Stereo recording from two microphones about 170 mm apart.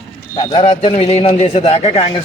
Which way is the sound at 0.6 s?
35° left (ahead or behind).